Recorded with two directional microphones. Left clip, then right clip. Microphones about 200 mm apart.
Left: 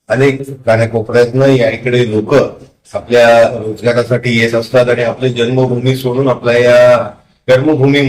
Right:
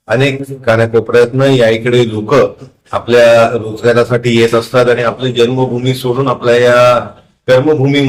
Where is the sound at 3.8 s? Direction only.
15° right (ahead or behind).